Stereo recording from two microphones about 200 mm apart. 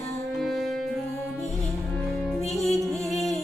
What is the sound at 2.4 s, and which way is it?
Music, 35° left (ahead or behind).